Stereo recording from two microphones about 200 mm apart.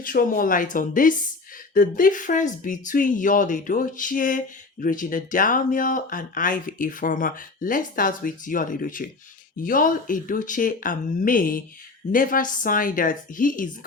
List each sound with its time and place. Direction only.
0.0 s speech: 45° left (ahead or behind)